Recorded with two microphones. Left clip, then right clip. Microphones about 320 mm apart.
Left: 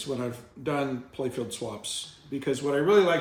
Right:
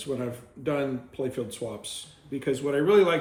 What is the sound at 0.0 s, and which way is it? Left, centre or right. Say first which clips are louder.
Speech: even; centre.